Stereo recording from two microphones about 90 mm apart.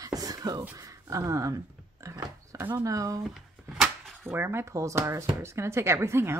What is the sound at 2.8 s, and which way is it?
Speech, 40° right (ahead or behind).